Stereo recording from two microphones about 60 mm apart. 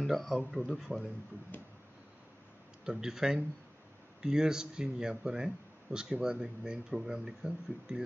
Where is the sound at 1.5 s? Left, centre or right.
Left.